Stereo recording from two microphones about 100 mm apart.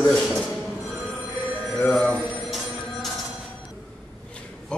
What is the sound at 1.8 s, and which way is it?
Telephone bell ringing, 10° left (ahead or behind).